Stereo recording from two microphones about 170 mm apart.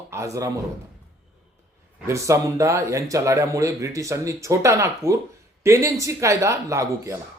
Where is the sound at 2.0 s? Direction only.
15° right (ahead or behind).